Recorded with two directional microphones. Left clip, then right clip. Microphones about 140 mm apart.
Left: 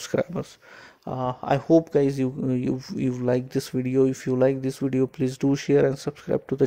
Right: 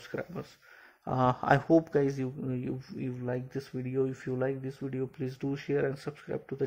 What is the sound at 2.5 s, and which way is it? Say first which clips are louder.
Speech: left 10 dB; 35° left (ahead or behind).